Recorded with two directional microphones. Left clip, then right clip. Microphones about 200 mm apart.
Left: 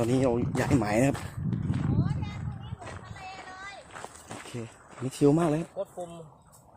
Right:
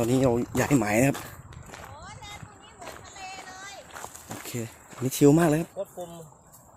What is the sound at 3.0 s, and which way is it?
Music, 55° right (ahead or behind).